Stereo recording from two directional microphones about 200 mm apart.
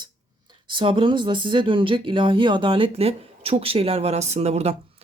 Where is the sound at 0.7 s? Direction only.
25° right (ahead or behind).